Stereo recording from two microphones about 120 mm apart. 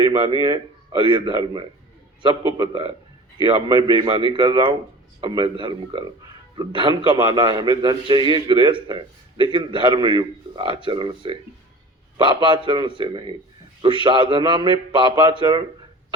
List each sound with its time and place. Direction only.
0.4 s a man's voice: 40° right (ahead or behind)